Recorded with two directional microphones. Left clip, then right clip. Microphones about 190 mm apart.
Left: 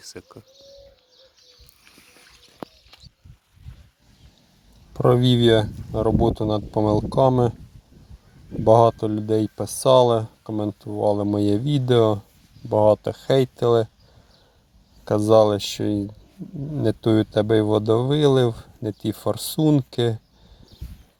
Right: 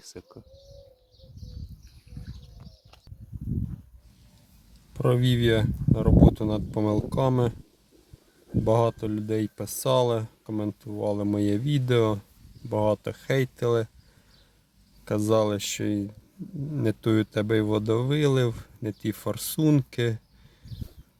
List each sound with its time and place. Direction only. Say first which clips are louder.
0.0 s speech: left 5 dB; centre (ahead or behind)
4.9 s speech: left 7 dB; 20° left (ahead or behind)
8.6 s speech: left 9 dB; 20° left (ahead or behind)
15.0 s speech: left 8 dB; 15° left (ahead or behind)